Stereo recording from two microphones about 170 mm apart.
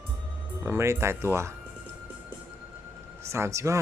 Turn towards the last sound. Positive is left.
turn(degrees=-15)  # may be behind; listen again after turning